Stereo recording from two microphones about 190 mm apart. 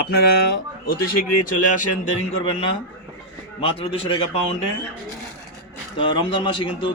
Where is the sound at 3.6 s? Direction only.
30° left (ahead or behind).